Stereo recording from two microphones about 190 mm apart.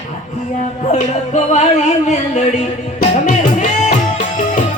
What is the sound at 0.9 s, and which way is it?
Music, 35° left (ahead or behind).